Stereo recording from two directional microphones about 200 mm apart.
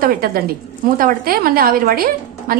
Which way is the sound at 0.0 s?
50° right (ahead or behind).